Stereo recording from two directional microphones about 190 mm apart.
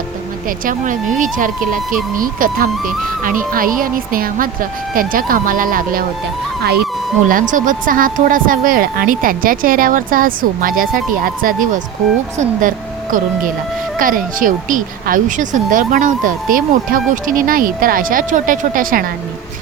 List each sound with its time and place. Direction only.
0.4 s speech: 45° right (ahead or behind)
7.5 s speech: 45° right (ahead or behind)